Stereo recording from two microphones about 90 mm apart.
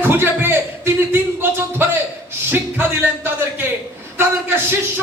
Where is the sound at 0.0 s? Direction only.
25° right (ahead or behind).